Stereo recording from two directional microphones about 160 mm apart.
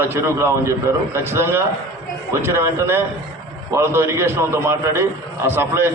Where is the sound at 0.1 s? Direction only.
15° right (ahead or behind).